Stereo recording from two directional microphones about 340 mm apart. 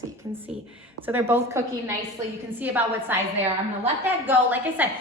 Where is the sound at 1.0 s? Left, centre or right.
Centre.